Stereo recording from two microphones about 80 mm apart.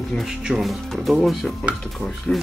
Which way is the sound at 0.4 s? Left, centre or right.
Centre.